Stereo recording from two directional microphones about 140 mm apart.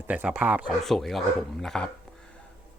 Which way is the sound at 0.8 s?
Centre (ahead or behind).